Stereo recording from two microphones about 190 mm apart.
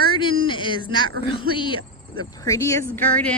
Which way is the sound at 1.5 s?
25° left (ahead or behind).